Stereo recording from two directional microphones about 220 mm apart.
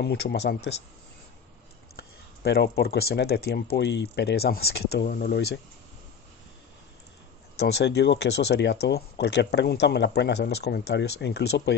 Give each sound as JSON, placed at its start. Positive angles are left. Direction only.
{"t": 0.0, "sound": "speech", "side_deg": 50}
{"t": 2.4, "sound": "speech", "side_deg": 45}
{"t": 7.5, "sound": "speech", "side_deg": 50}